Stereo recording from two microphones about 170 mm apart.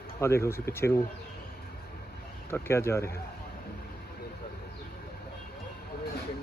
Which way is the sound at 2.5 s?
15° left (ahead or behind).